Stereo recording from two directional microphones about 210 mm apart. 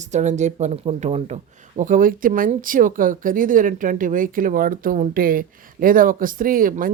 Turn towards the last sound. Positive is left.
turn(degrees=-40)  # may be behind; listen again after turning